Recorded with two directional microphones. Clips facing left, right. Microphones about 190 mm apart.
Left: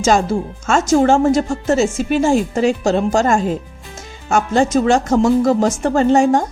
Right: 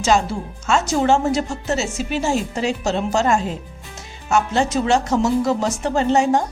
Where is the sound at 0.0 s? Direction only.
45° left (ahead or behind).